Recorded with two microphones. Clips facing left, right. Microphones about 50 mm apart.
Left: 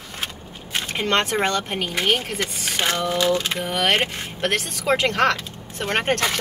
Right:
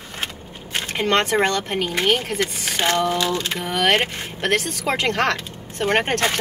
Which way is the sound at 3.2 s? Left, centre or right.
Centre.